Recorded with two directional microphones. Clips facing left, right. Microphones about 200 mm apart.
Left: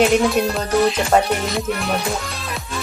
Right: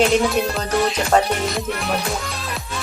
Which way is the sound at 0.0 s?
Centre (ahead or behind).